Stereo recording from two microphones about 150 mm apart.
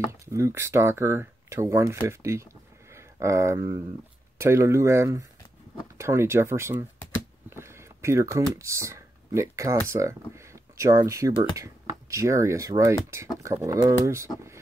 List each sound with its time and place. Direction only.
0.2 s speech: 20° right (ahead or behind)